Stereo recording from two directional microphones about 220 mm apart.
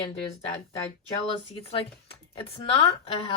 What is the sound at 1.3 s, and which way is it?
Speech, 25° left (ahead or behind).